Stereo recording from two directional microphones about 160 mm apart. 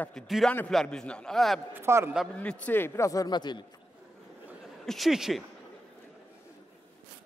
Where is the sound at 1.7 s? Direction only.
15° right (ahead or behind).